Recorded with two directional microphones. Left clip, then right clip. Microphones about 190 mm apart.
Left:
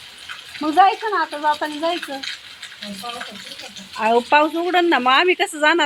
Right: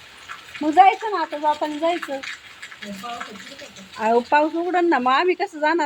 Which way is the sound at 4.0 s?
Centre (ahead or behind).